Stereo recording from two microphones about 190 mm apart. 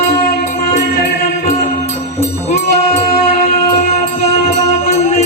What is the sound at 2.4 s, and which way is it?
Music, 35° left (ahead or behind).